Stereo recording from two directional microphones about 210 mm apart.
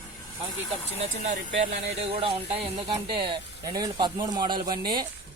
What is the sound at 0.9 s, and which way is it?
Speech, 35° right (ahead or behind).